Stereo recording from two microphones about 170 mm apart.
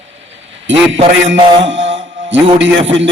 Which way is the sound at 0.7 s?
90° right.